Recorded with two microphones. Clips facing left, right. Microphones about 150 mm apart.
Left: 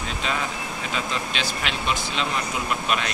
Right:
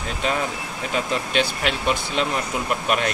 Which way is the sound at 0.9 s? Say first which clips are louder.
Right 7 dB; 50° right (ahead or behind).